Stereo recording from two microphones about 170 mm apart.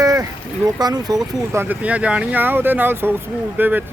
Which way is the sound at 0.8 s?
25° right (ahead or behind).